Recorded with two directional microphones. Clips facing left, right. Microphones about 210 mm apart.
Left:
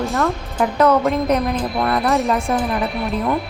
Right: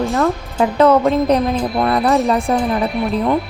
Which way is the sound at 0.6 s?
30° right (ahead or behind).